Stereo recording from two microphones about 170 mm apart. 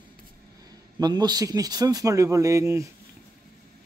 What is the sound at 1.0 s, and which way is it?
Speech, 25° right (ahead or behind).